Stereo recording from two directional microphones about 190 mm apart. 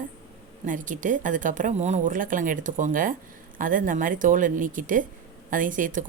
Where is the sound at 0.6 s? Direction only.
45° right (ahead or behind).